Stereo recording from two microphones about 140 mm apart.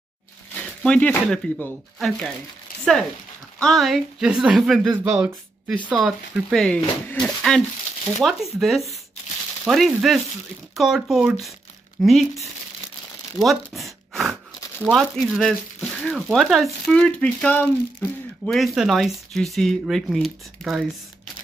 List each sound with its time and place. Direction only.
0.6 s speech: 10° left (ahead or behind)
2.7 s a sound: 90° left
3.5 s speech: 5° left (ahead or behind)
13.4 s speech: centre (ahead or behind)